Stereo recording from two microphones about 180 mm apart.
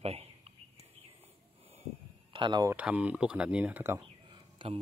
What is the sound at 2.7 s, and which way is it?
Speech, 10° right (ahead or behind).